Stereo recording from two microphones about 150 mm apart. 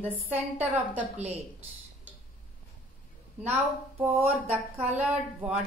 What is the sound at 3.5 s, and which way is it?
A woman's voice, 15° right (ahead or behind).